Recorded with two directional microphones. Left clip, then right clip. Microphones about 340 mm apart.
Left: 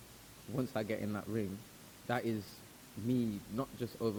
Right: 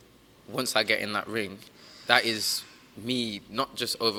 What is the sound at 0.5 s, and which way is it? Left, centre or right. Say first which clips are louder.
A man's voice: right 12 dB; centre.